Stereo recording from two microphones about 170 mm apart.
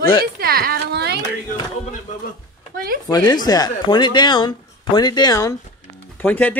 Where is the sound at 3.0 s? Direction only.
25° left (ahead or behind).